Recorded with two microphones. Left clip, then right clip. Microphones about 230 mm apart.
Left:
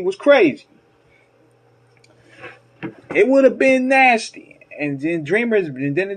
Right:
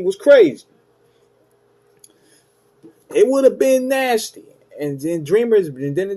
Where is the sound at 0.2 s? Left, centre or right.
Centre.